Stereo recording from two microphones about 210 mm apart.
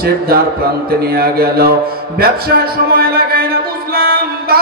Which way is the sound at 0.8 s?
45° right (ahead or behind).